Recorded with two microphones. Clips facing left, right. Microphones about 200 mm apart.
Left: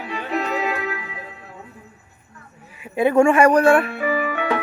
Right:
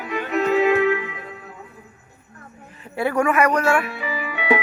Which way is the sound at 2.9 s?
20° left (ahead or behind).